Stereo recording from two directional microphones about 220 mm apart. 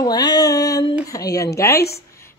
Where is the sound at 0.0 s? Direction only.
20° left (ahead or behind).